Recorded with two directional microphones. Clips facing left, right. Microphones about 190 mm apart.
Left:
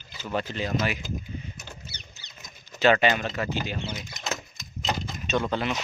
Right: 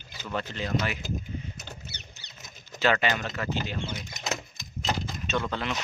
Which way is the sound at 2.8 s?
20° left (ahead or behind).